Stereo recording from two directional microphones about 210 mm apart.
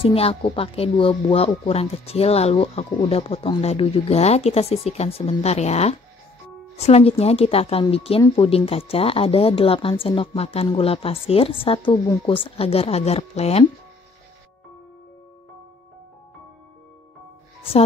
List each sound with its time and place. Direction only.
0.0 s speech: 25° left (ahead or behind)